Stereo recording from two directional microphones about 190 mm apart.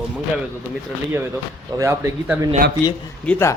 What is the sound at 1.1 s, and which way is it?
Speech, 10° right (ahead or behind).